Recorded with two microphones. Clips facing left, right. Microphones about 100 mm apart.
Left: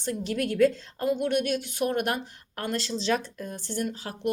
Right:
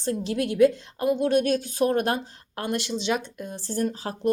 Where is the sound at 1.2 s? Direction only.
35° right (ahead or behind); by 3.6 s 20° right (ahead or behind).